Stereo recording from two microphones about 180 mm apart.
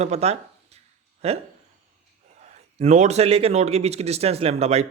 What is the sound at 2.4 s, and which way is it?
A man's voice, 40° right (ahead or behind).